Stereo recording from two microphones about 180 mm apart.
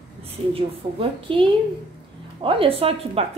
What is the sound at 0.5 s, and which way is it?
A woman's voice, 30° right (ahead or behind).